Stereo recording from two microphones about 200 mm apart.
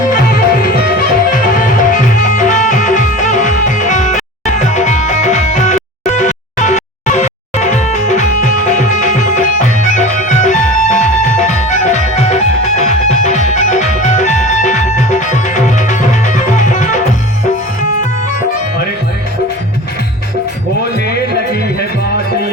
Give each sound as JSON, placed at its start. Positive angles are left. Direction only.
{"t": 0.1, "sound": "music", "side_deg": 45}